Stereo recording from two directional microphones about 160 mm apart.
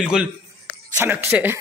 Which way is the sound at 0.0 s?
5° right (ahead or behind).